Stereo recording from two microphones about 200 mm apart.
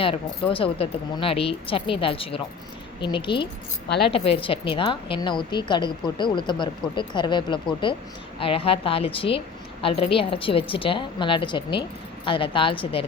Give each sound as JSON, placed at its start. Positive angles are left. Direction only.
{"t": 0.0, "sound": "a woman's voice", "side_deg": 25}